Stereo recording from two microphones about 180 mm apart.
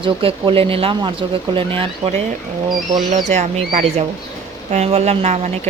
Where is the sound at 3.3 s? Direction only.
40° right (ahead or behind).